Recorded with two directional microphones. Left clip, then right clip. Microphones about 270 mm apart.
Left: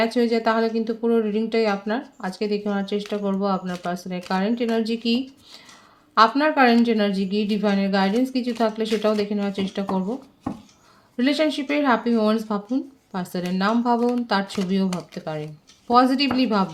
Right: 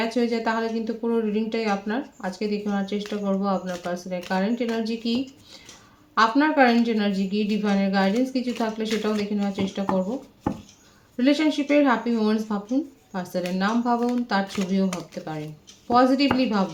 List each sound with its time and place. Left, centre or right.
0.0 s speech: left
11.2 s speech: left